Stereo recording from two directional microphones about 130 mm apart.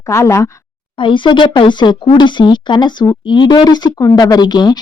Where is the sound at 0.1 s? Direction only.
20° left (ahead or behind).